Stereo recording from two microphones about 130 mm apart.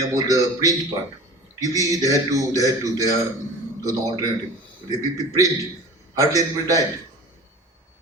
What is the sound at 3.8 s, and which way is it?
Speech, 25° right (ahead or behind).